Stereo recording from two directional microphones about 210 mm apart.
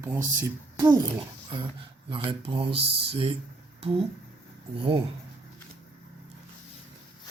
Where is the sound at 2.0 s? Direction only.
25° right (ahead or behind).